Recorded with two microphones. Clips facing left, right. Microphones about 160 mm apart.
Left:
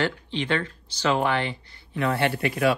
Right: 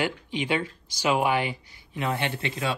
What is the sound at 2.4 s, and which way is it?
Speech, 25° right (ahead or behind).